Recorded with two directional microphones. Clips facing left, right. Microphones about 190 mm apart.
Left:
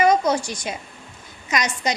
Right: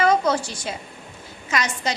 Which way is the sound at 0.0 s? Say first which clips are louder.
Left 1 dB; 15° left (ahead or behind).